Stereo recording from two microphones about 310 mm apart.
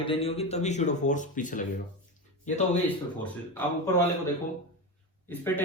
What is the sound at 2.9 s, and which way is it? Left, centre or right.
Speech, centre.